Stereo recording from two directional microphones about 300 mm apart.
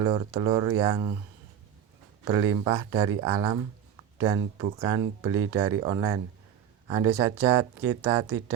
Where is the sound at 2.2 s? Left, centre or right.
Centre.